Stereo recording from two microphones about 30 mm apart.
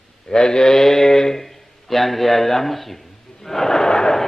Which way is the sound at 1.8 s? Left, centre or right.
Centre.